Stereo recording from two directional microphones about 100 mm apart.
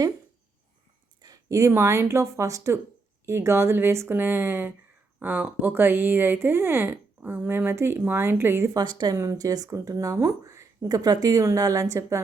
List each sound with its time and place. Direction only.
1.2 s speech: 35° right (ahead or behind)
8.7 s a woman's voice: 45° right (ahead or behind)
9.1 s speech: 35° right (ahead or behind)